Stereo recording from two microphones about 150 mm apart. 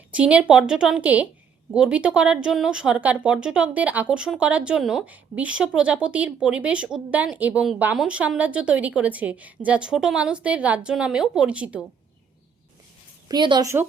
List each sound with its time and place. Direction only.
0.1 s speech: 10° right (ahead or behind)
13.2 s a woman's voice: 30° right (ahead or behind)